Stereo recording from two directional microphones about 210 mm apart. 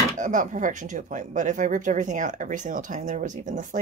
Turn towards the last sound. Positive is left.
turn(degrees=-35)  # may be behind; listen again after turning